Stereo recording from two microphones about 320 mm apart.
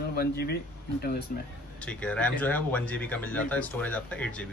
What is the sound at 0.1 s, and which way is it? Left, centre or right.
Speech, left.